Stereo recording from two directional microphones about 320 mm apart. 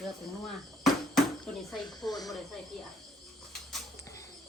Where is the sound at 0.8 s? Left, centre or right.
Centre.